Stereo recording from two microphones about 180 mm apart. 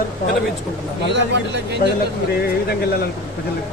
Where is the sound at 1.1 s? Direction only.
75° right (ahead or behind).